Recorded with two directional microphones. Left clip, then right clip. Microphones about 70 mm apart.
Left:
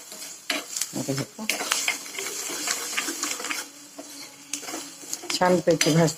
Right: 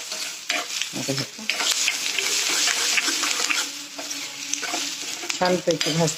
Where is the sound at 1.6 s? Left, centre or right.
Left.